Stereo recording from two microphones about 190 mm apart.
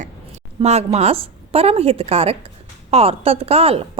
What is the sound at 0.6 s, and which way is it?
A woman's voice, 35° right (ahead or behind).